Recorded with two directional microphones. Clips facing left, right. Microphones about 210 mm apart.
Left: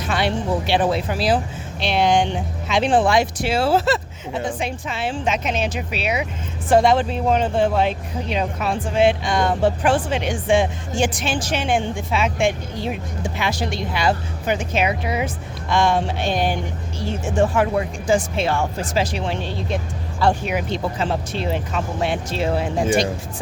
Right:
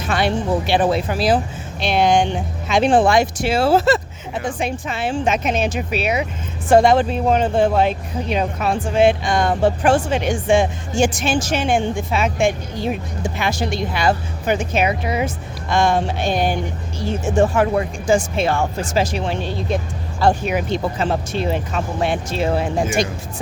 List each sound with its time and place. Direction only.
0.1 s speech: 45° right (ahead or behind)